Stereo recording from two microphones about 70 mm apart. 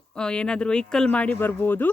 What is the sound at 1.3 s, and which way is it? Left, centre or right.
Speech, left.